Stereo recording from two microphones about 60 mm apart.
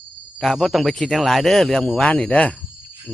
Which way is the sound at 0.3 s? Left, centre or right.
Centre.